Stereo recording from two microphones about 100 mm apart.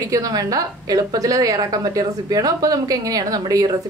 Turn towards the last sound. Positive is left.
turn(degrees=-40)  # may be behind; listen again after turning